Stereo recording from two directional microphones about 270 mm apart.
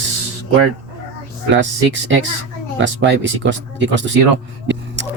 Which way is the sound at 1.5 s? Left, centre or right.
Right.